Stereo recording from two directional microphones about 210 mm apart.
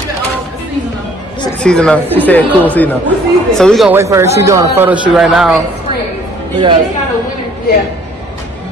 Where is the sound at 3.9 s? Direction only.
15° right (ahead or behind).